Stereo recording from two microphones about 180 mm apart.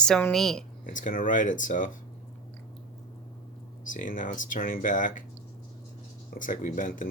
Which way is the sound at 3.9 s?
50° left (ahead or behind).